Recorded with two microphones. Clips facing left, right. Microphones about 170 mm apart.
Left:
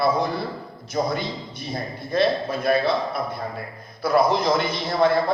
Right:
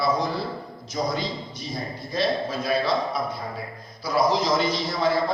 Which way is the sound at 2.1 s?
55° left (ahead or behind).